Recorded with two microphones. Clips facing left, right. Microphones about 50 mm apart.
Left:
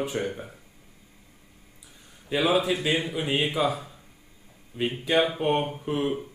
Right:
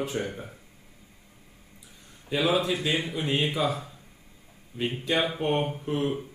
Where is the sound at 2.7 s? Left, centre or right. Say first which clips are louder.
Left 2 dB; centre.